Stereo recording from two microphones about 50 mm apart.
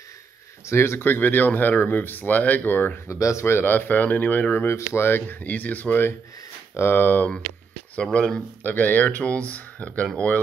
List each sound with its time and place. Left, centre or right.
0.7 s speech: left
3.1 s speech: left
4.6 s speech: left
5.0 s speech: left
5.4 s speech: left
6.7 s speech: left
7.9 s speech: left
8.6 s speech: left